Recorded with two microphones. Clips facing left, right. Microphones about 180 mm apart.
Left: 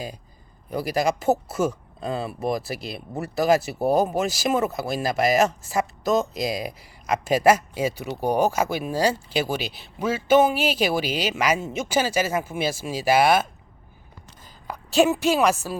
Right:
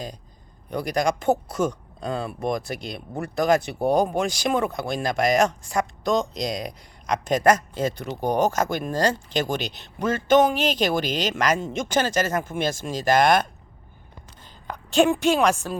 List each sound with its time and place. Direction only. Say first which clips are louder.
0.7 s speech: even; 5° left (ahead or behind)
14.7 s speech: even; 5° left (ahead or behind)